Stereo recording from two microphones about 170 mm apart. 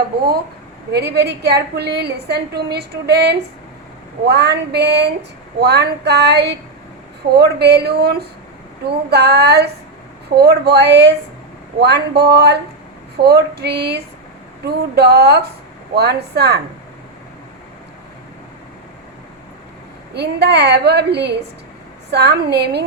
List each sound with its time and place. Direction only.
0.9 s a woman's voice: 70° right (ahead or behind); by 11.1 s 90° right
11.8 s a woman's voice: 75° right (ahead or behind)
20.1 s a woman's voice: 80° right